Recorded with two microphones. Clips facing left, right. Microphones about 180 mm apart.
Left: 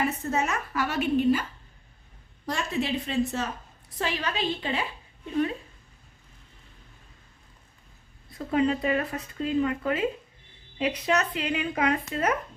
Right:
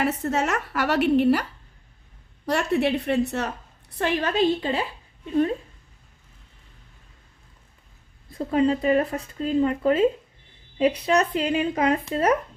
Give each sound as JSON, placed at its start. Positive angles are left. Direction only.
{"t": 0.0, "sound": "a woman's voice", "side_deg": -80}
{"t": 2.5, "sound": "a woman's voice", "side_deg": -65}
{"t": 8.3, "sound": "speech", "side_deg": -30}